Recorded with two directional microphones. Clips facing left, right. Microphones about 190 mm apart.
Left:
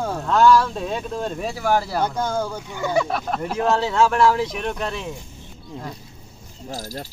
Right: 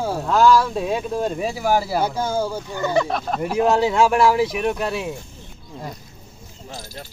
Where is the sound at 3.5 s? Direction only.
15° right (ahead or behind).